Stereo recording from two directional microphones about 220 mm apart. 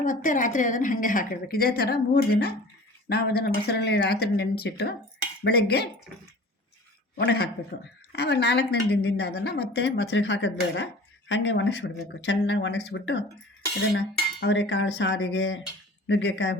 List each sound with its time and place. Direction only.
0.0 s a woman's voice: 35° left (ahead or behind)
7.2 s a woman's voice: 45° left (ahead or behind)
14.3 s cutlery: 50° left (ahead or behind)
16.0 s a woman's voice: 55° left (ahead or behind)